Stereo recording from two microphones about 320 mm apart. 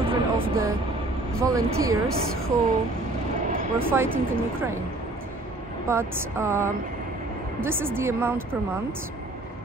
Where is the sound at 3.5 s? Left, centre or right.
Right.